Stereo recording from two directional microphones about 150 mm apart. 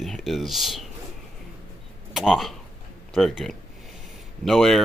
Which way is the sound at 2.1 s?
Centre (ahead or behind).